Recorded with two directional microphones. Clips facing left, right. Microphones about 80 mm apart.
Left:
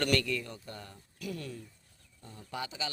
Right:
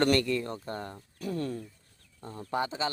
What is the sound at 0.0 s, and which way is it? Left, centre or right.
Speech, right.